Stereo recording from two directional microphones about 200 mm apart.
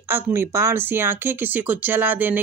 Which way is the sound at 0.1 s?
10° right (ahead or behind).